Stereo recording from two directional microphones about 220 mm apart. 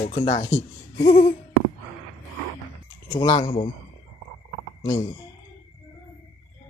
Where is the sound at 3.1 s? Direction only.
25° left (ahead or behind).